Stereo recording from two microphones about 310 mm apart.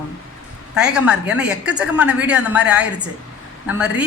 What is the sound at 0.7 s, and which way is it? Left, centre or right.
A woman's voice, centre.